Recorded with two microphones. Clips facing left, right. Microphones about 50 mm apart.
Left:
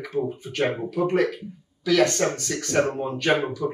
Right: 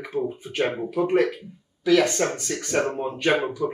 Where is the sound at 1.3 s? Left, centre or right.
Right.